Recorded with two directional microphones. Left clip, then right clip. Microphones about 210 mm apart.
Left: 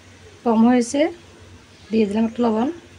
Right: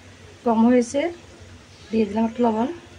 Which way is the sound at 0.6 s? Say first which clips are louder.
Left 2 dB; 40° left (ahead or behind).